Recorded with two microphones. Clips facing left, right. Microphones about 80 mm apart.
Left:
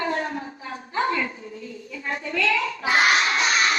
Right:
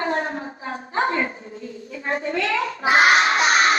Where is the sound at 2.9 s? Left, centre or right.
Right.